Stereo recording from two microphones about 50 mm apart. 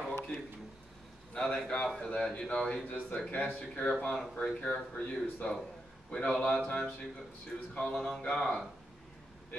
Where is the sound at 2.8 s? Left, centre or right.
Left.